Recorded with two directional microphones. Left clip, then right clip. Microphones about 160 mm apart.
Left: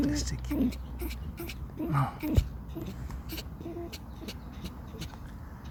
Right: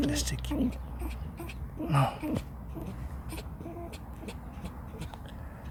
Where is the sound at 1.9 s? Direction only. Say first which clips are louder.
Right 3 dB; 25° right (ahead or behind).